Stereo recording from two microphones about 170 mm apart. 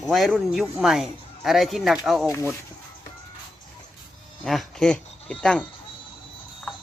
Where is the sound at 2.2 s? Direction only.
15° left (ahead or behind).